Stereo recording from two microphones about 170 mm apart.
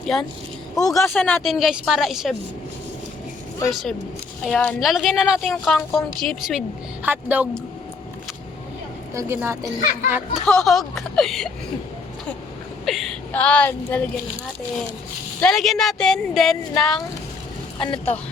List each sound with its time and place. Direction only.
0.1 s a woman's voice: centre (ahead or behind)
0.8 s speech: 20° left (ahead or behind)
1.1 s a woman's voice: centre (ahead or behind)
3.7 s a woman's voice: centre (ahead or behind)
9.1 s speech: 15° right (ahead or behind)
10.4 s a woman's voice: 5° left (ahead or behind)
12.8 s a sound: centre (ahead or behind)
15.4 s a woman's voice: centre (ahead or behind)
17.7 s speech: 30° left (ahead or behind)